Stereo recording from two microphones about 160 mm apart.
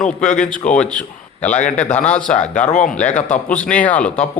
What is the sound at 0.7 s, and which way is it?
A man's voice, 5° left (ahead or behind).